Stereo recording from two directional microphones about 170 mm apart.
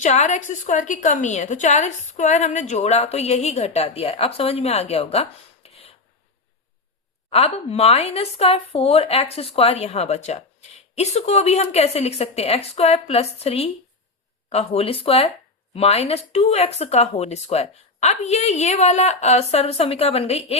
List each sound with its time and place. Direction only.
0.0 s speech: 45° left (ahead or behind)
7.3 s speech: 35° left (ahead or behind)